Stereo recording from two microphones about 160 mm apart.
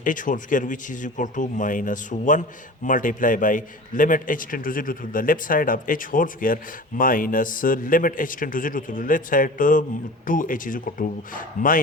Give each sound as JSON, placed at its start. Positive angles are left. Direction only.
{"t": 0.0, "sound": "a man's voice", "side_deg": 55}